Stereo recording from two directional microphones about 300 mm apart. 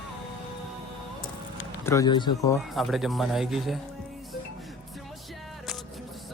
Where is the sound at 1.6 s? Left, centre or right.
Centre.